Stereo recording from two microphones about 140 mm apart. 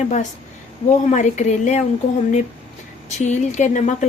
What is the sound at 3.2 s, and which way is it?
Speech, 55° left (ahead or behind).